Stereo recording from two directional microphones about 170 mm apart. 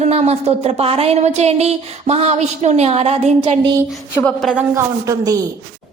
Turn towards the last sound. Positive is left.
turn(degrees=-20)  # may be behind; listen again after turning